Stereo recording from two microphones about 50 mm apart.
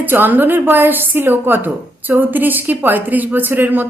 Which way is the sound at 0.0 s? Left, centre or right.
Right.